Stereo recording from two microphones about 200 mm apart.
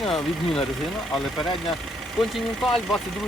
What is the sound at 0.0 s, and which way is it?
Speech, centre (ahead or behind).